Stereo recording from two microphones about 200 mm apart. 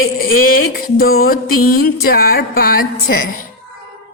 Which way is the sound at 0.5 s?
50° left (ahead or behind).